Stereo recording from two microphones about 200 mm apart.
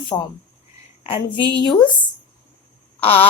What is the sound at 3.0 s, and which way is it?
Speech, 25° left (ahead or behind).